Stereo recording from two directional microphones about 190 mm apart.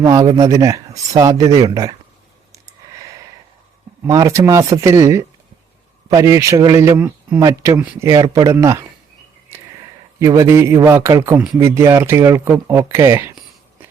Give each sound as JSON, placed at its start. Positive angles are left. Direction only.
{"t": 0.0, "sound": "speech", "side_deg": -20}
{"t": 4.0, "sound": "speech", "side_deg": -15}
{"t": 8.1, "sound": "speech", "side_deg": -20}
{"t": 10.2, "sound": "speech", "side_deg": -15}